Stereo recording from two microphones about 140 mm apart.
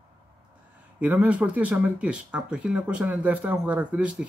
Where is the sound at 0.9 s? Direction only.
10° right (ahead or behind).